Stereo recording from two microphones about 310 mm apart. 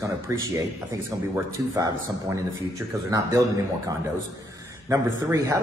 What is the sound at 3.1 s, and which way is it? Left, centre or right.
Speech, centre.